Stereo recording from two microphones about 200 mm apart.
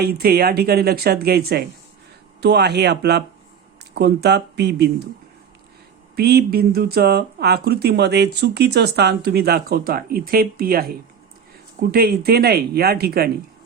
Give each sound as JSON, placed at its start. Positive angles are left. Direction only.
{"t": 0.0, "sound": "speech", "side_deg": -50}
{"t": 6.1, "sound": "speech", "side_deg": -50}